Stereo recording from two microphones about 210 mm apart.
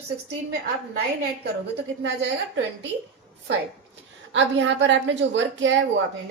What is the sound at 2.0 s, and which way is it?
Speech, 60° right (ahead or behind).